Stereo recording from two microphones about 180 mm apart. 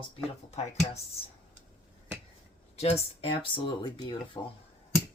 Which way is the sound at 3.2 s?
30° left (ahead or behind).